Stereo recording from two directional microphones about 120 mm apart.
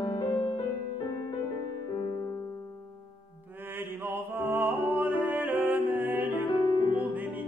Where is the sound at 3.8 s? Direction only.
15° right (ahead or behind).